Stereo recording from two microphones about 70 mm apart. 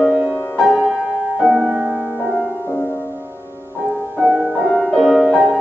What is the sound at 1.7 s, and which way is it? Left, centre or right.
Music, centre.